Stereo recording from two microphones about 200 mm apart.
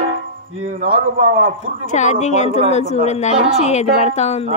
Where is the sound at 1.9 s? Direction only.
35° left (ahead or behind).